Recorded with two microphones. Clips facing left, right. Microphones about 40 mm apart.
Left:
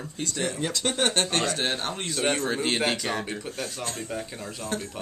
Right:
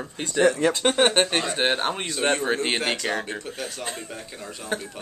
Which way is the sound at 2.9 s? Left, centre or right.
Centre.